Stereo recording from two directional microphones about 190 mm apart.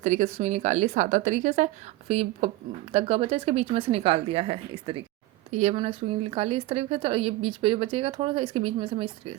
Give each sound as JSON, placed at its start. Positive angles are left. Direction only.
{"t": 0.0, "sound": "a woman's voice", "side_deg": -40}